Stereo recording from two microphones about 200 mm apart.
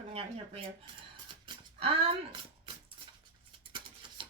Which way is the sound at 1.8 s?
30° right (ahead or behind).